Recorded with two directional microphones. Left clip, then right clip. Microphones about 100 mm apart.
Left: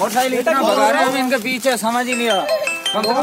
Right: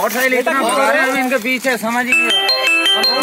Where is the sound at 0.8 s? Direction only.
Centre (ahead or behind).